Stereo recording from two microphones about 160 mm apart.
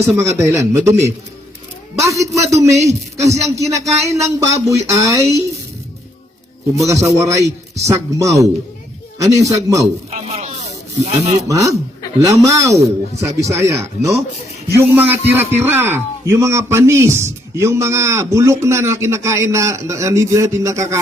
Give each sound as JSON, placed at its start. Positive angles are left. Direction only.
{"t": 0.2, "sound": "a man's voice", "side_deg": -20}
{"t": 6.8, "sound": "a man's voice", "side_deg": -20}
{"t": 10.1, "sound": "a sound", "side_deg": -40}
{"t": 11.0, "sound": "speech", "side_deg": -40}
{"t": 11.4, "sound": "a man's voice", "side_deg": -20}